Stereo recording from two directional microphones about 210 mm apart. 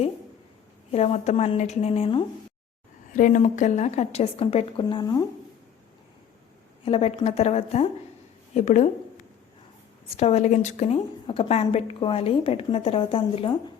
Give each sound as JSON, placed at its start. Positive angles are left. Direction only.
{"t": 0.9, "sound": "a woman's voice", "side_deg": 30}
{"t": 3.1, "sound": "a woman's voice", "side_deg": 40}
{"t": 6.8, "sound": "a woman's voice", "side_deg": 30}
{"t": 10.2, "sound": "a woman's voice", "side_deg": 30}